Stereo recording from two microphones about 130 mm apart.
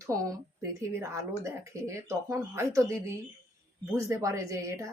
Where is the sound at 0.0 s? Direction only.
25° right (ahead or behind).